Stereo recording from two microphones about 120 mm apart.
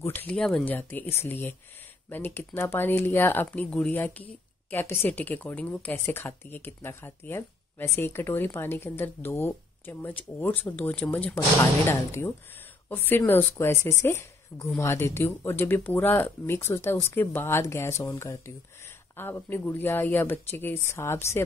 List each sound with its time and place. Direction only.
0.0 s speech: 15° left (ahead or behind)
0.7 s a woman's voice: 15° left (ahead or behind)